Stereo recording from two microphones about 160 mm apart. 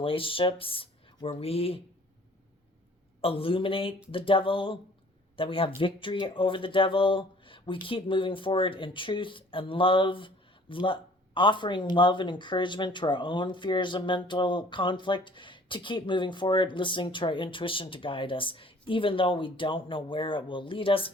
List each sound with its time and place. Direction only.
0.0 s speech: 35° left (ahead or behind)
3.2 s speech: 35° left (ahead or behind)